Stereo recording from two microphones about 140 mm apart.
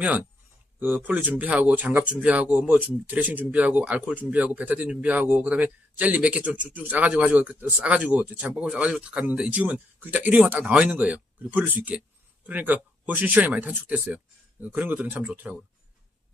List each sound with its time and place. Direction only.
0.7 s speech: 10° right (ahead or behind)